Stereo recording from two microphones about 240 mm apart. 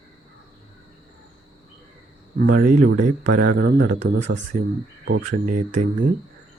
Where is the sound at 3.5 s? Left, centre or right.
Right.